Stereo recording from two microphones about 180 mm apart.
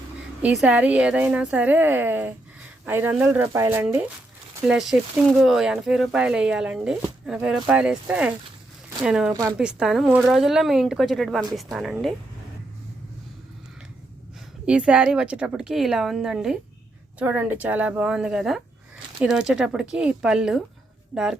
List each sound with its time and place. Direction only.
0.4 s a woman's voice: 5° right (ahead or behind)
4.7 s speech: centre (ahead or behind)
9.3 s a woman's voice: 20° right (ahead or behind)
9.6 s speech: 5° right (ahead or behind)
14.7 s a woman's voice: 5° right (ahead or behind)